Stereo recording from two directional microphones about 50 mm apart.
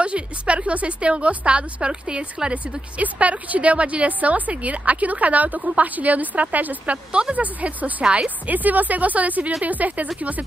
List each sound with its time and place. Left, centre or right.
0.0 s a woman's voice: right
3.0 s a woman's voice: right
7.1 s a woman's voice: centre
7.3 s a woman's voice: right
8.0 s a woman's voice: centre
8.5 s a woman's voice: right